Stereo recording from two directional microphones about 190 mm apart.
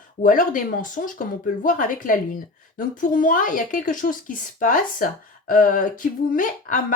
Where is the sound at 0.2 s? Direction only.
45° left (ahead or behind).